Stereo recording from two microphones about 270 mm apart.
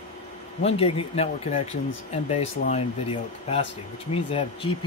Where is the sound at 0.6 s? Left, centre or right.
Left.